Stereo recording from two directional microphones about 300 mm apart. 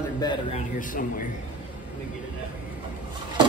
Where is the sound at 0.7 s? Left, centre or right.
Left.